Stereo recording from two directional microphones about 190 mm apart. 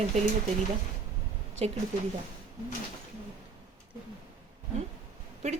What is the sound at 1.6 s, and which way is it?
Speech, 30° right (ahead or behind).